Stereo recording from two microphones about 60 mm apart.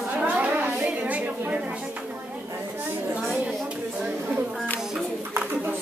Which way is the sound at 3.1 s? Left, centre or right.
Centre.